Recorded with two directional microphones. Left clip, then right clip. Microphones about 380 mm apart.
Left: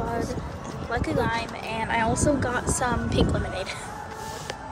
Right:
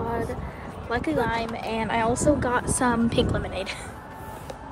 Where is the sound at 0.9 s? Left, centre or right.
Centre.